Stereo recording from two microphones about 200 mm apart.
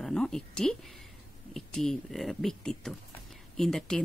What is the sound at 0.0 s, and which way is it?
Speech, 5° left (ahead or behind).